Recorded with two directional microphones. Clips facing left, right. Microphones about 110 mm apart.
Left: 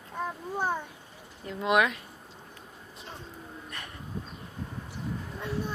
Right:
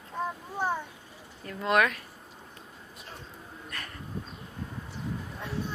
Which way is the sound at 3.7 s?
20° left (ahead or behind).